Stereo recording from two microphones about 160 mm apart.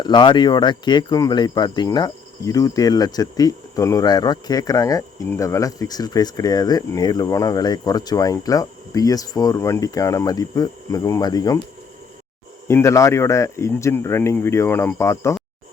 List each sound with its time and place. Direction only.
0.0 s speech: 30° left (ahead or behind)
12.6 s speech: 15° left (ahead or behind)